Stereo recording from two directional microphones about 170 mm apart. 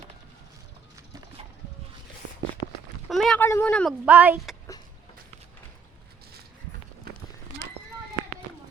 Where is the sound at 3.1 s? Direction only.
Centre (ahead or behind).